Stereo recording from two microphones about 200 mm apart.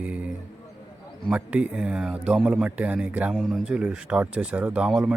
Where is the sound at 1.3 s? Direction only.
5° right (ahead or behind).